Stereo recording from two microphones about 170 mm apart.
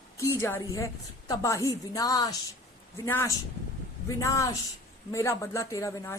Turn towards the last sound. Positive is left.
turn(degrees=20)  # may be behind; listen again after turning